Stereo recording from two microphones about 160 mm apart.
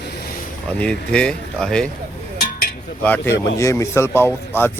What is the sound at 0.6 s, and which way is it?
Speech, 5° left (ahead or behind).